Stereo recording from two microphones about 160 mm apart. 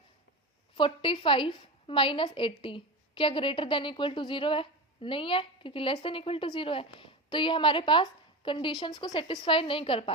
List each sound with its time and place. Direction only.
0.8 s a woman's voice: 30° left (ahead or behind)